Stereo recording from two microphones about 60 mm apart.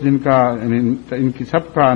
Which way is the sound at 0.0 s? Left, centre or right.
Centre.